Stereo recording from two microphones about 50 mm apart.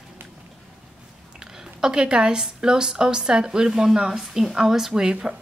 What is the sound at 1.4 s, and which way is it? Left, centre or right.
A woman's voice, centre.